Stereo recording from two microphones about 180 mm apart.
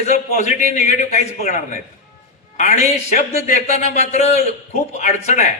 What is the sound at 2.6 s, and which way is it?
A man's voice, 45° left (ahead or behind).